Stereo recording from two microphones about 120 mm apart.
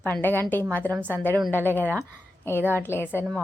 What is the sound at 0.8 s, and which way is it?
Speech, 15° right (ahead or behind).